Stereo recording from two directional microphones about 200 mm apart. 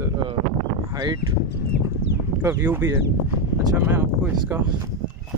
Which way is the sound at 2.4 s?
10° right (ahead or behind).